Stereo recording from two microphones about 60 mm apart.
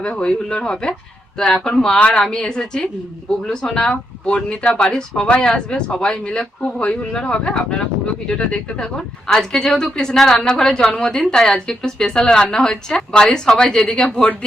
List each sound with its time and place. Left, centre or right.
0.0 s a woman's voice: centre